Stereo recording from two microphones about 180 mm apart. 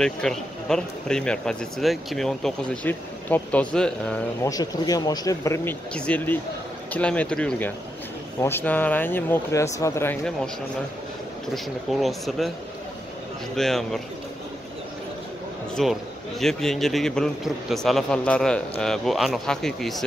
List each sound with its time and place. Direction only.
0.0 s a man's voice: 5° left (ahead or behind)
4.4 s speech: 20° left (ahead or behind)
11.5 s a man's voice: centre (ahead or behind)
13.6 s a man's voice: centre (ahead or behind)
15.7 s a man's voice: centre (ahead or behind)